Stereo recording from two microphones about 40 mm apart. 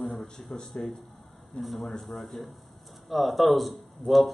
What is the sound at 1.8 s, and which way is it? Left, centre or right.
A man's voice, centre.